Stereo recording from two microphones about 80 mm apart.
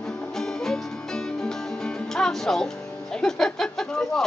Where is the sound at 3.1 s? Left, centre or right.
Centre.